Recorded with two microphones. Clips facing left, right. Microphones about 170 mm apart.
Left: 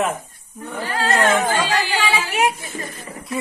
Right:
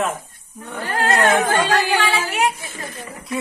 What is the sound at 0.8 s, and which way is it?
Speech, 50° right (ahead or behind).